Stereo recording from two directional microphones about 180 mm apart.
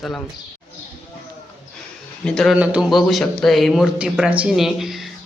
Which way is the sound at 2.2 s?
5° left (ahead or behind).